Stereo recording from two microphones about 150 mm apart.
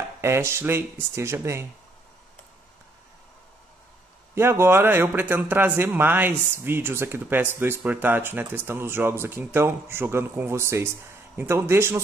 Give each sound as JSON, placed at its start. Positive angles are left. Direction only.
{"t": 0.2, "sound": "speech", "side_deg": -15}
{"t": 4.4, "sound": "speech", "side_deg": -15}